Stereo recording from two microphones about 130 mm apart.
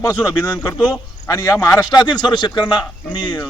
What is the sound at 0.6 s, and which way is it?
Speech, 10° left (ahead or behind).